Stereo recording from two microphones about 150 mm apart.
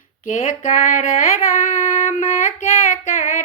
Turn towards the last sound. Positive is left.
turn(degrees=60)  # may be behind; listen again after turning